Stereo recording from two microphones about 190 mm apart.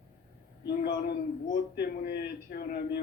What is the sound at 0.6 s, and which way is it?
A man's voice, 55° left (ahead or behind).